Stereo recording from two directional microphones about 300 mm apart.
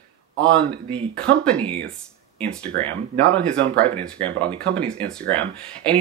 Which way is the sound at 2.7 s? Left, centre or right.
Right.